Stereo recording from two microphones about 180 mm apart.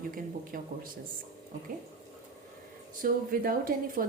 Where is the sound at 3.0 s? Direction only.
50° right (ahead or behind).